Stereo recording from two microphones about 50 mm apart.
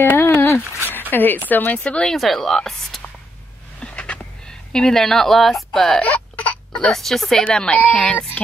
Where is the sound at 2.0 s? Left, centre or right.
Centre.